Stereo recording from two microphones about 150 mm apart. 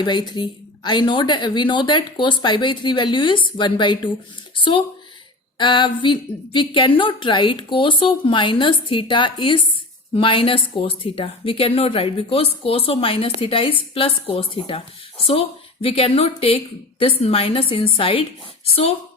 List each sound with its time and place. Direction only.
0.0 s a woman's voice: 30° left (ahead or behind)
4.5 s a sound: 35° left (ahead or behind)
5.5 s a woman's voice: 30° left (ahead or behind)